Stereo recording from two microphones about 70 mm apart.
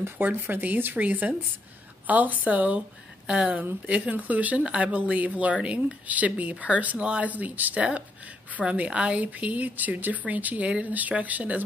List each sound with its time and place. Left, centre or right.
0.0 s speech: right